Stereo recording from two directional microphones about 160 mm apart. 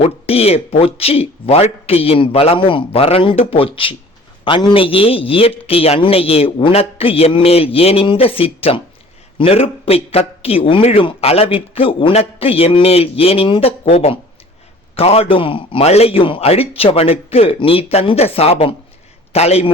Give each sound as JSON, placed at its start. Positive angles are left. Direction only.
{"t": 0.0, "sound": "a man's voice", "side_deg": 40}